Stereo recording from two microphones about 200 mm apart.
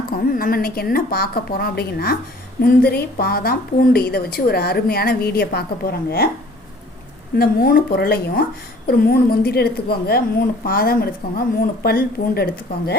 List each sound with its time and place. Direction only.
0.1 s a woman's voice: 45° left (ahead or behind)
7.3 s a woman's voice: 50° left (ahead or behind)